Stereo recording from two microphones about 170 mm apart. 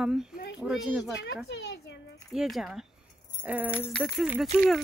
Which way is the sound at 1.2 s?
90° left.